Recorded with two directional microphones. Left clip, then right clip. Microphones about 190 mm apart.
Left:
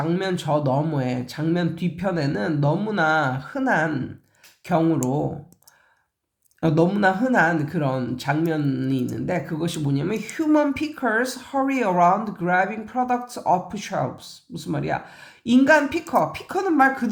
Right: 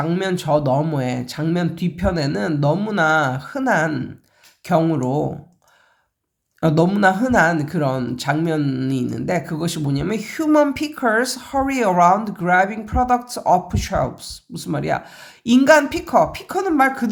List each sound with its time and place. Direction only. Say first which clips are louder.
0.0 s speech: right 3 dB; 20° right (ahead or behind)
6.6 s speech: right 3 dB; 20° right (ahead or behind)